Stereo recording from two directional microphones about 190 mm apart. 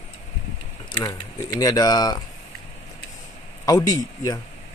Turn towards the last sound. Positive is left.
turn(degrees=20)  # may be behind; listen again after turning